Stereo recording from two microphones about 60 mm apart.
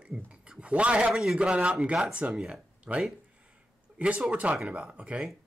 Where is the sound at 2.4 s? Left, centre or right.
Centre.